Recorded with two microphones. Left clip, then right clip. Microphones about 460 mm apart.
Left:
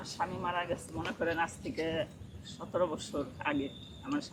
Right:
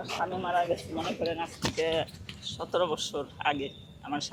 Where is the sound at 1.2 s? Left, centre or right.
Left.